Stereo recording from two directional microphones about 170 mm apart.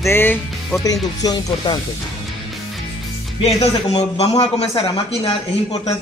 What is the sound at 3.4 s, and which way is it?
A man's voice, 40° left (ahead or behind).